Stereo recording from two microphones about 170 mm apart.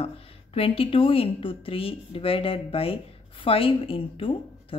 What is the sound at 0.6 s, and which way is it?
A woman's voice, 35° left (ahead or behind).